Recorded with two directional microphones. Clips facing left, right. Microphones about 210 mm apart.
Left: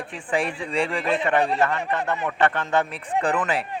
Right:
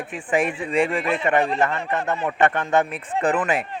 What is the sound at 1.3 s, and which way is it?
Speech, 20° right (ahead or behind).